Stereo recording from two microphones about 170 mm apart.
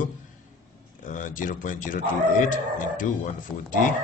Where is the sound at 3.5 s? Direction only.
15° left (ahead or behind).